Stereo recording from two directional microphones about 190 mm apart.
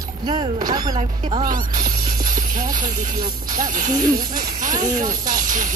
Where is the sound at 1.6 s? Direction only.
20° right (ahead or behind).